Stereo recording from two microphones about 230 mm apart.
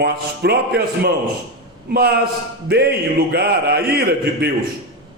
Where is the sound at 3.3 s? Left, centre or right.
Right.